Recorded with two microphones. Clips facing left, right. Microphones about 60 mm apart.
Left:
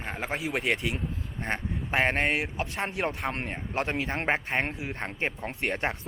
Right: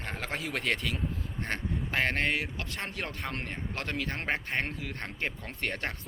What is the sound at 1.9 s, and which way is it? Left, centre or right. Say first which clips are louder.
A man's voice: left 4 dB; left.